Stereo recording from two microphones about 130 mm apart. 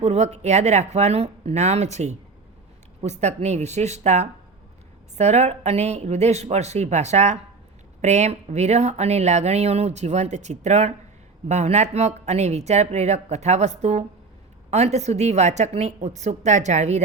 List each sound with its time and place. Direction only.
0.0 s speech: 60° right (ahead or behind)